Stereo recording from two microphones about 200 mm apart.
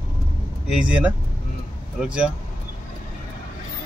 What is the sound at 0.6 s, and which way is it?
Speech, 5° right (ahead or behind).